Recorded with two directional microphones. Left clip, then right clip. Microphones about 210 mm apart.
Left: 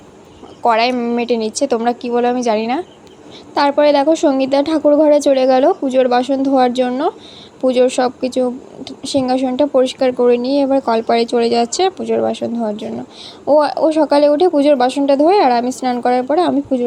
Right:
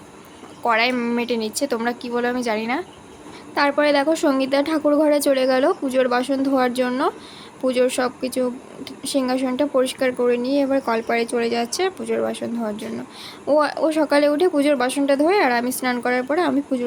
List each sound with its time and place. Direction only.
0.6 s a woman's voice: 15° left (ahead or behind)